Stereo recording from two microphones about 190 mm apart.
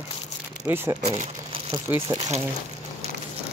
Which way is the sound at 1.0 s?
35° right (ahead or behind).